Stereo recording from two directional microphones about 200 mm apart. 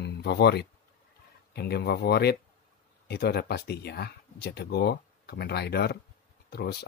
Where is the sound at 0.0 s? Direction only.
55° left (ahead or behind).